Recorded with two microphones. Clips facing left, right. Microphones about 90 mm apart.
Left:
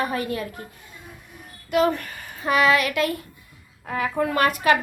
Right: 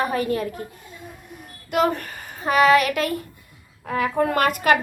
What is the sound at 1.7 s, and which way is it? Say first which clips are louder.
Speech: even; 40° right (ahead or behind).